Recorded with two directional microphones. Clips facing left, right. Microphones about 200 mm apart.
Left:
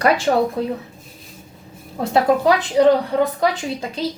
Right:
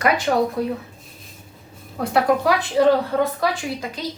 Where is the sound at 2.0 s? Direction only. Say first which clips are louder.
Left 3 dB; 25° left (ahead or behind).